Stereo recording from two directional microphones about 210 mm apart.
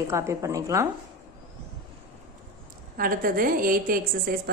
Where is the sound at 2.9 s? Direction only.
45° right (ahead or behind).